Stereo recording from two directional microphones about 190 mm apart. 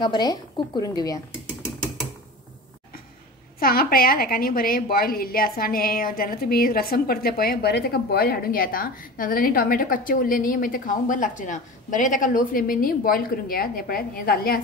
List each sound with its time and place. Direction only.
0.0 s a woman's voice: 20° left (ahead or behind)
3.5 s a woman's voice: 50° left (ahead or behind)